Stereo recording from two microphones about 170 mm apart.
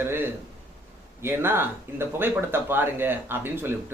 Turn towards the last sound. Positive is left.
turn(degrees=-15)  # may be behind; listen again after turning